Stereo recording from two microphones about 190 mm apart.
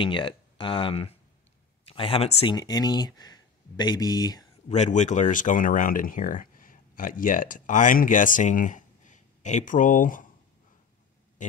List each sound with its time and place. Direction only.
0.0 s speech: 25° left (ahead or behind)
2.5 s speech: 20° left (ahead or behind)
4.6 s speech: 40° left (ahead or behind)